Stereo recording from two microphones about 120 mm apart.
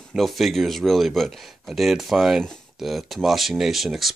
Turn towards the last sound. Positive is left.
turn(degrees=0)  # may be behind; listen again after turning